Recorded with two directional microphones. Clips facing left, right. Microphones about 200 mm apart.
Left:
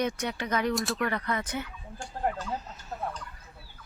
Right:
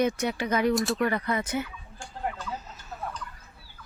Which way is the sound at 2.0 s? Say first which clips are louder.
Left 3 dB; 40° left (ahead or behind).